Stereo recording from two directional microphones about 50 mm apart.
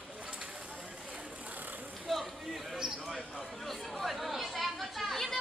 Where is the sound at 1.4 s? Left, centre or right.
Right.